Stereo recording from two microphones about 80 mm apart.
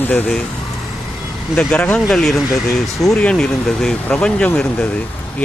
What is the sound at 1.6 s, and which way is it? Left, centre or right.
Speech, centre.